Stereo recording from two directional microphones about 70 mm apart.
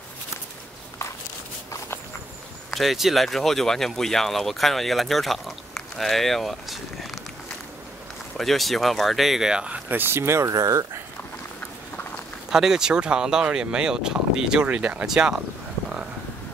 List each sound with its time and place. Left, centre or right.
2.7 s speech: centre
8.4 s speech: centre
9.8 s speech: right
10.5 s speech: right
12.4 s speech: centre